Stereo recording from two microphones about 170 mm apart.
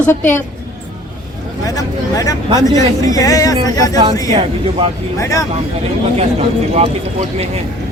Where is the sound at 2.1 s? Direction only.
20° left (ahead or behind).